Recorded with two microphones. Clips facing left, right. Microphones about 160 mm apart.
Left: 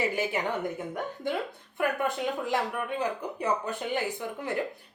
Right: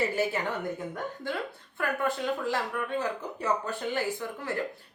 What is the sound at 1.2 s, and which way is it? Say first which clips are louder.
A woman's voice: left 3 dB; 20° left (ahead or behind).